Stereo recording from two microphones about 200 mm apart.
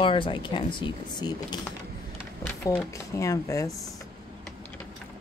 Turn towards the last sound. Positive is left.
turn(degrees=15)  # may be behind; listen again after turning